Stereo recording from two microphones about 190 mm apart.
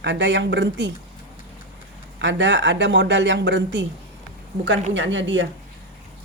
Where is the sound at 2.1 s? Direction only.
70° right (ahead or behind).